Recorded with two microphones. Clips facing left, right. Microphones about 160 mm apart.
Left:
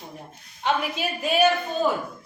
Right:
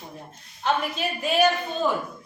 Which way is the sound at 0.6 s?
5° left (ahead or behind).